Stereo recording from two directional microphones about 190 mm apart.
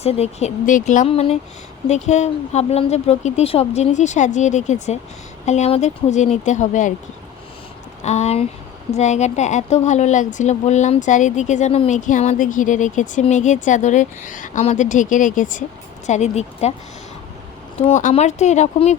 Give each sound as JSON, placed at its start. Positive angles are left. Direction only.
{"t": 0.0, "sound": "speech", "side_deg": 35}
{"t": 8.0, "sound": "speech", "side_deg": 35}
{"t": 17.7, "sound": "speech", "side_deg": 35}